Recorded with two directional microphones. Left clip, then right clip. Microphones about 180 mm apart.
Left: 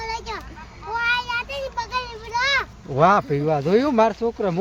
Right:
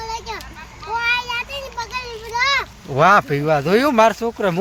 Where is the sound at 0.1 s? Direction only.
30° left (ahead or behind).